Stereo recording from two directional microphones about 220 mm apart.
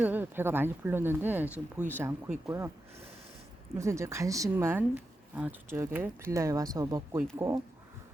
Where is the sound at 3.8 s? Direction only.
15° right (ahead or behind).